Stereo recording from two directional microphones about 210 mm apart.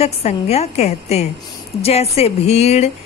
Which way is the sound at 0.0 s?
30° left (ahead or behind).